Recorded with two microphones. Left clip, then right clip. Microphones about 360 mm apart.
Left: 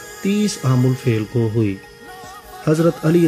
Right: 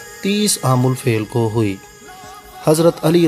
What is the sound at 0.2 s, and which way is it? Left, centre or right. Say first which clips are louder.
Speech: right 3 dB; centre.